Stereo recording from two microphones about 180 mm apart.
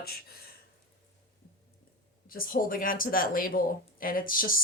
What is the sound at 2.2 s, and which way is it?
Speech, 50° left (ahead or behind).